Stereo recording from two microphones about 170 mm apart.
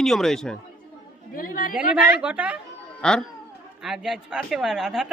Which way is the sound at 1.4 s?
55° left (ahead or behind).